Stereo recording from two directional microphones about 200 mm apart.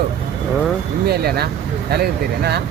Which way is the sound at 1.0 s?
50° right (ahead or behind).